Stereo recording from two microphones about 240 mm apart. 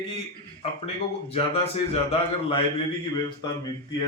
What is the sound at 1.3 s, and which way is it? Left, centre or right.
Speech, left.